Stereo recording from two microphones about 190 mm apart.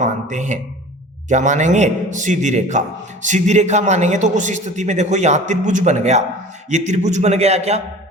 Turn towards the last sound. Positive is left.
turn(degrees=-35)  # may be behind; listen again after turning